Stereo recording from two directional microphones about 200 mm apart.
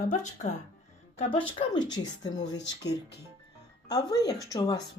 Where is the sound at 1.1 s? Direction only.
25° left (ahead or behind).